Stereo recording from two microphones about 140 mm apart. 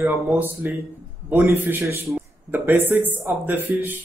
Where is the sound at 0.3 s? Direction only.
10° right (ahead or behind).